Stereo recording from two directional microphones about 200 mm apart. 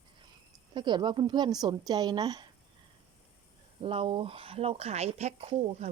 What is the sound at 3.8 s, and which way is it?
Speech, 25° right (ahead or behind).